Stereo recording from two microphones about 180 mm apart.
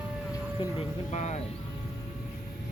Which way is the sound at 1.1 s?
40° left (ahead or behind).